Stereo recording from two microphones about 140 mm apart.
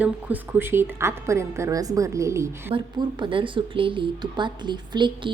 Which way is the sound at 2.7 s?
35° right (ahead or behind).